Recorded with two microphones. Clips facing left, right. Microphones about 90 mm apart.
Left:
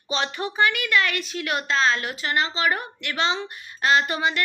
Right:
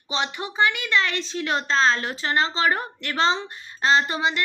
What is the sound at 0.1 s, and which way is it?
A woman's voice, 20° right (ahead or behind).